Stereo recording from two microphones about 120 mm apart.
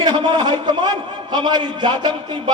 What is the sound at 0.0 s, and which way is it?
A man's voice, 40° right (ahead or behind).